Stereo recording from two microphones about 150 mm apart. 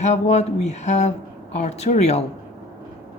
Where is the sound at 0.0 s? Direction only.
50° left (ahead or behind).